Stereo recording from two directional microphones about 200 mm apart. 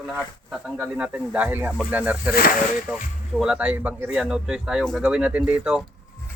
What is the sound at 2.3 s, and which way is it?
Speech, 45° left (ahead or behind).